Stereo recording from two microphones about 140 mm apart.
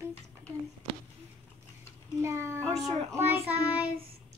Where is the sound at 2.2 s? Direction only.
20° right (ahead or behind).